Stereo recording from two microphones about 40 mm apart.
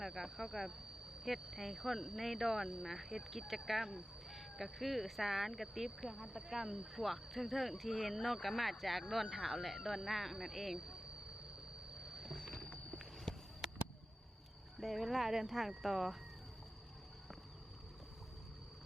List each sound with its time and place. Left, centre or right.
0.0 s speech: centre
6.9 s speech: centre
10.8 s speech: centre
11.9 s vehicle: centre
12.7 s a sound: left
14.8 s speech: centre